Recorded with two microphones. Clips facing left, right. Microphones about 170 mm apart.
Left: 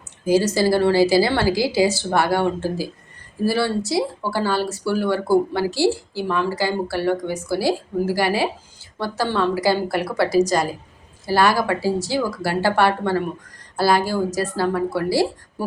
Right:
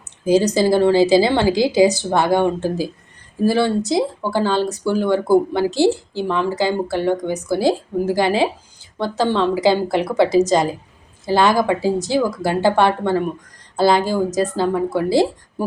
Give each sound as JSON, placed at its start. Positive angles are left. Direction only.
{"t": 0.3, "sound": "speech", "side_deg": -20}